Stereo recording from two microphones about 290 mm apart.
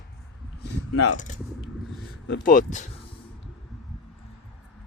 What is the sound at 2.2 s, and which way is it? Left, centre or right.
Speech, left.